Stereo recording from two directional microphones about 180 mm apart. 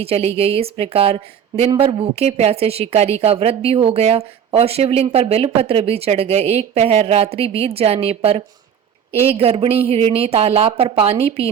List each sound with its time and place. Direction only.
0.0 s a woman's voice: 35° right (ahead or behind)